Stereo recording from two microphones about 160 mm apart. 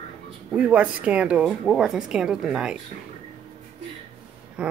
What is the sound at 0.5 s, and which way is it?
Speech, 5° right (ahead or behind).